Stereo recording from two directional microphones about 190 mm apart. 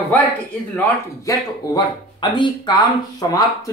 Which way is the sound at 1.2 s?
20° left (ahead or behind).